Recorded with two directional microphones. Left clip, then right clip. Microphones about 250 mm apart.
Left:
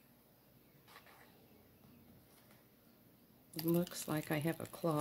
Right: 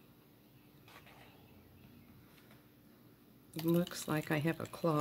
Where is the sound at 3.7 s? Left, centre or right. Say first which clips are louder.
Right 3 dB; centre.